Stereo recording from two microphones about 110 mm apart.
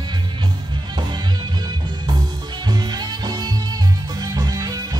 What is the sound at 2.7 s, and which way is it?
Music, 40° right (ahead or behind).